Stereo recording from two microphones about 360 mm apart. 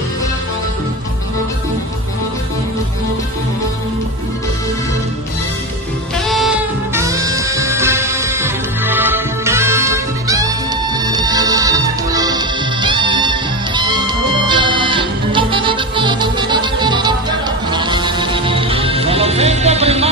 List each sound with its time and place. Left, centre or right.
6.2 s music: centre